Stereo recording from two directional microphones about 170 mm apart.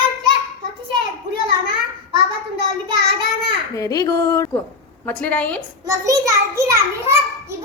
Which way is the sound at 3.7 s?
20° left (ahead or behind).